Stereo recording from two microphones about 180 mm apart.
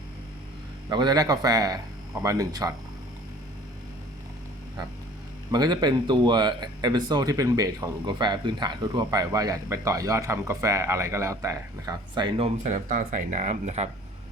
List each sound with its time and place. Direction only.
0.9 s speech: 25° right (ahead or behind)
5.5 s speech: 20° right (ahead or behind)
12.6 s speech: 45° right (ahead or behind)